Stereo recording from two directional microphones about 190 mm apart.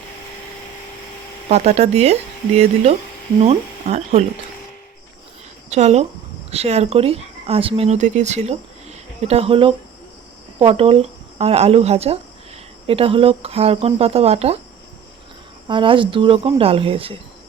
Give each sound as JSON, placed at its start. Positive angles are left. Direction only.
{"t": 1.5, "sound": "speech", "side_deg": -35}
{"t": 3.4, "sound": "speech", "side_deg": -35}
{"t": 5.7, "sound": "speech", "side_deg": -35}
{"t": 15.6, "sound": "speech", "side_deg": -25}